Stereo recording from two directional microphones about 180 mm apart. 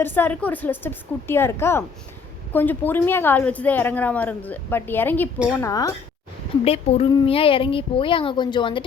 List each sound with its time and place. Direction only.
0.0 s a woman's voice: 10° left (ahead or behind)
6.7 s a woman's voice: 35° left (ahead or behind)